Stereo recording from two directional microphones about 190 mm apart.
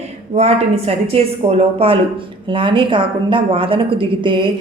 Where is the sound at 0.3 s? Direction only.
35° right (ahead or behind).